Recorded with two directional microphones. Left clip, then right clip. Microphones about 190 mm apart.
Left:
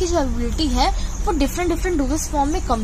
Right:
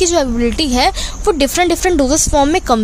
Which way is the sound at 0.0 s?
45° right (ahead or behind).